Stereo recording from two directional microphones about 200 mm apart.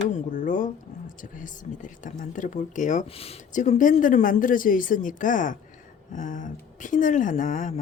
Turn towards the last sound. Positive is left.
turn(degrees=40)  # may be behind; listen again after turning